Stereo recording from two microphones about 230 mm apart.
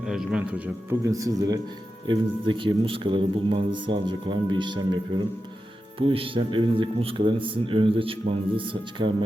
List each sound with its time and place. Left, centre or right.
0.0 s a man's voice: centre; by 9.1 s right